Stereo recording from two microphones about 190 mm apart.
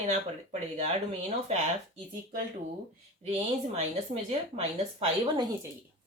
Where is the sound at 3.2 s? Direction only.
30° right (ahead or behind).